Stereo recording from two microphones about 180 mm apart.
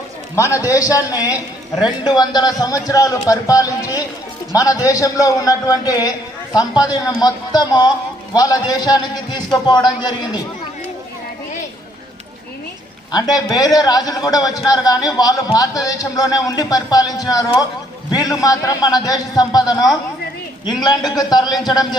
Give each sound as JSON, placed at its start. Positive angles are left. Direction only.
{"t": 0.3, "sound": "a man's voice", "side_deg": 15}
{"t": 1.3, "sound": "a woman's voice", "side_deg": -5}
{"t": 2.0, "sound": "a man's voice", "side_deg": 25}
{"t": 13.1, "sound": "a man's voice", "side_deg": 20}
{"t": 21.2, "sound": "a man's voice", "side_deg": 25}